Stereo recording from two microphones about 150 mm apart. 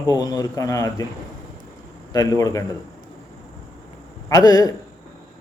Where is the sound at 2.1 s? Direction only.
20° left (ahead or behind).